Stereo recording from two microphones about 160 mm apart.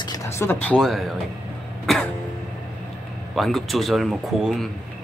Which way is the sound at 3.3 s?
Centre (ahead or behind).